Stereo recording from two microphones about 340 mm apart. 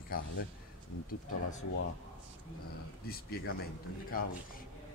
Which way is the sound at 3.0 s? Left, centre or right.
Left.